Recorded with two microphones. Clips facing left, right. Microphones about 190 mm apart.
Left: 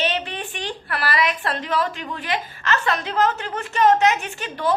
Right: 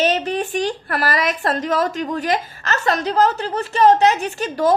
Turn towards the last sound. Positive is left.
turn(degrees=-40)  # may be behind; listen again after turning